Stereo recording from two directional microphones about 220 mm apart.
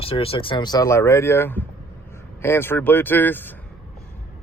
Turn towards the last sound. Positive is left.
turn(degrees=10)  # may be behind; listen again after turning